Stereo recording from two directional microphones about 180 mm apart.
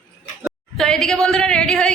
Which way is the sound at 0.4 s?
5° left (ahead or behind).